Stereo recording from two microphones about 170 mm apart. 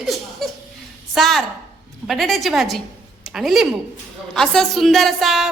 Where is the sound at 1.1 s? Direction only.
Centre (ahead or behind).